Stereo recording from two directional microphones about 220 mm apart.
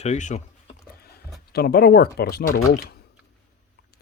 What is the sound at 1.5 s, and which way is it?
Speech, 45° left (ahead or behind).